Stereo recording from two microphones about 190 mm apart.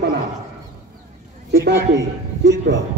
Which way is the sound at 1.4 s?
65° right (ahead or behind).